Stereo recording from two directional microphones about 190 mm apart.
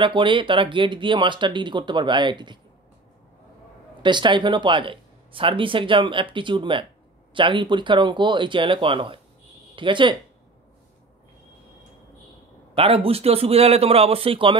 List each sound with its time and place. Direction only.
0.0 s speech: 25° right (ahead or behind)
4.0 s speech: 25° right (ahead or behind)
12.7 s a man's voice: 30° right (ahead or behind)